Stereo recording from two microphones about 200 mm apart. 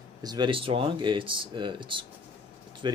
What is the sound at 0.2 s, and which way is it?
Speech, 20° right (ahead or behind).